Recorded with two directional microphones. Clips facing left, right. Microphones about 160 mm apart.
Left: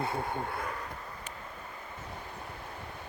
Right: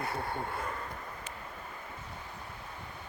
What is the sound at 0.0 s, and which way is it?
Speech, 20° left (ahead or behind).